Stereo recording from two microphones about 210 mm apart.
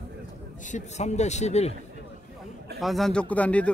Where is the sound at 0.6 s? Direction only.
35° left (ahead or behind).